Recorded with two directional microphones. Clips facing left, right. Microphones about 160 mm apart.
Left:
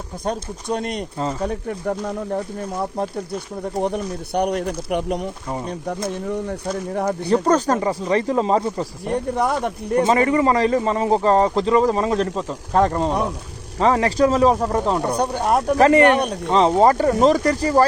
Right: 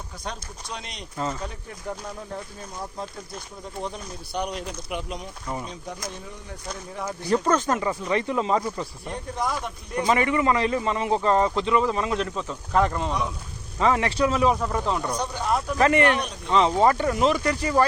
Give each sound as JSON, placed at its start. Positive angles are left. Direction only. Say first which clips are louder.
{"t": 0.3, "sound": "speech", "louder": "left 12 dB", "side_deg": 50}
{"t": 1.5, "sound": "speech", "louder": "left 11 dB", "side_deg": 65}
{"t": 3.6, "sound": "speech", "louder": "left 11 dB", "side_deg": 65}
{"t": 7.3, "sound": "a man's voice", "louder": "left 4 dB", "side_deg": 30}
{"t": 9.0, "sound": "speech", "louder": "left 9 dB", "side_deg": 60}
{"t": 10.0, "sound": "a man's voice", "louder": "left 5 dB", "side_deg": 30}
{"t": 15.1, "sound": "speech", "louder": "left 7 dB", "side_deg": 55}
{"t": 15.8, "sound": "a man's voice", "louder": "left 6 dB", "side_deg": 35}
{"t": 16.1, "sound": "speech", "louder": "left 8 dB", "side_deg": 55}
{"t": 16.5, "sound": "a man's voice", "louder": "left 4 dB", "side_deg": 35}